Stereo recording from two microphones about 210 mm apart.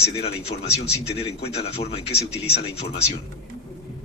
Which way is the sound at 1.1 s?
30° left (ahead or behind).